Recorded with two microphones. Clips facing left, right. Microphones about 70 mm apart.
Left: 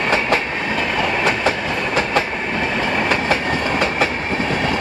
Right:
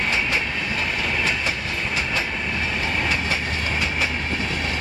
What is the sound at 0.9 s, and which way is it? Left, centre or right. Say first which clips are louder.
Train: left 8 dB; left.